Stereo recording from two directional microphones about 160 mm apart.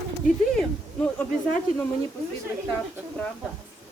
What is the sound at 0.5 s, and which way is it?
Speech, 5° left (ahead or behind).